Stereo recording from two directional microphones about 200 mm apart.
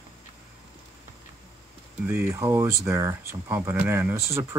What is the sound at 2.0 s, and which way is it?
Speech, 10° right (ahead or behind).